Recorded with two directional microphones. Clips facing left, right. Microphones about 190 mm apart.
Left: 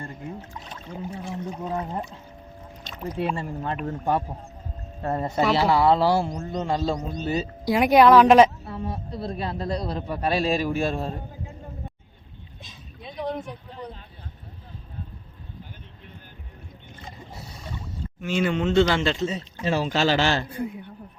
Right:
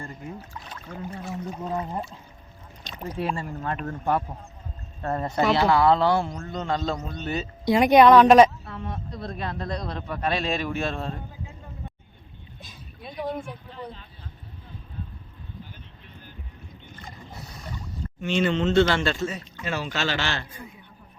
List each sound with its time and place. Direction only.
0.7 s a sound: 20° left (ahead or behind)
1.2 s a woman's voice: 5° right (ahead or behind)
3.4 s a woman's voice: 15° left (ahead or behind)
6.2 s speech: 15° left (ahead or behind)
7.1 s a man's voice: 40° left (ahead or behind)
7.6 s speech: 5° left (ahead or behind)
9.2 s a man's voice: 30° left (ahead or behind)
9.7 s speech: 10° left (ahead or behind)
10.1 s a man's voice: 35° left (ahead or behind)
10.8 s speech: 10° left (ahead or behind)
13.1 s vehicle: 5° right (ahead or behind)
18.2 s speech: 10° left (ahead or behind)
19.5 s a man's voice: 35° left (ahead or behind)